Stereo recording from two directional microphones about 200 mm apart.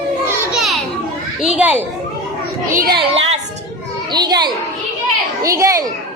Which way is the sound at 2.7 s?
50° right (ahead or behind).